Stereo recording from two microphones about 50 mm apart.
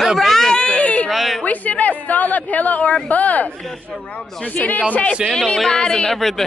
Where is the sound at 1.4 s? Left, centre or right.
Left.